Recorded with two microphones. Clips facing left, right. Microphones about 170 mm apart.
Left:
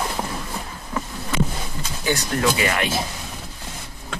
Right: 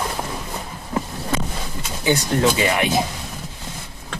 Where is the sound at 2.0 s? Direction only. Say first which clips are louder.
Right 4 dB; 25° right (ahead or behind).